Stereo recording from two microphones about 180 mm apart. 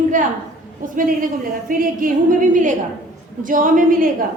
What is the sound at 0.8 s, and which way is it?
A woman's voice, 50° right (ahead or behind).